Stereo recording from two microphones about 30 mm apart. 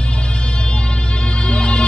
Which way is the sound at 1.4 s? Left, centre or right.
Left.